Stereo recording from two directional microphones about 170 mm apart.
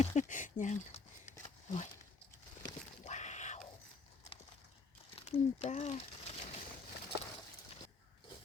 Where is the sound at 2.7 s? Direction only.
45° left (ahead or behind).